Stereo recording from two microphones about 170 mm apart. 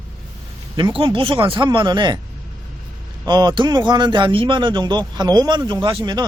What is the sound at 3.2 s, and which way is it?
A man's voice, 25° right (ahead or behind).